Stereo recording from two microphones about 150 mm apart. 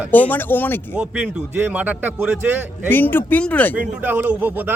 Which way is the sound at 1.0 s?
5° right (ahead or behind).